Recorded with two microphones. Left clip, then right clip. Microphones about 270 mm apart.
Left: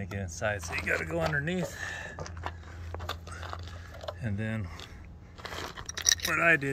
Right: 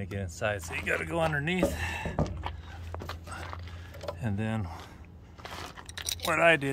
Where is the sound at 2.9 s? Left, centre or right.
Centre.